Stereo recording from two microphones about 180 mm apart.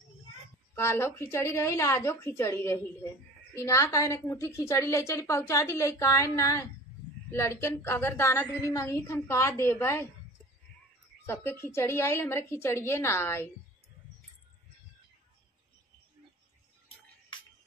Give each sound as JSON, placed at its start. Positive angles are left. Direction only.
{"t": 0.7, "sound": "a woman's voice", "side_deg": 15}
{"t": 11.2, "sound": "a woman's voice", "side_deg": 15}